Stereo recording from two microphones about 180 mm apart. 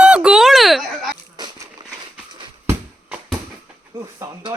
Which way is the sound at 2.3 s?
25° right (ahead or behind).